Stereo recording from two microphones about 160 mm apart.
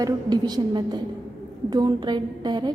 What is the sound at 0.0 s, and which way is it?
A woman's voice, 25° right (ahead or behind).